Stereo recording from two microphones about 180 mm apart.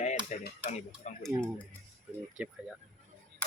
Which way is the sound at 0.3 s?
45° left (ahead or behind).